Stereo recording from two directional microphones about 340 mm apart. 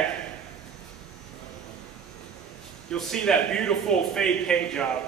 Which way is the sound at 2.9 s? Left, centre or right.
Centre.